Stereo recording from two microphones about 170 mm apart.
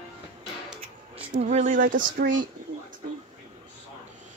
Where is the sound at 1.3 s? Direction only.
45° right (ahead or behind).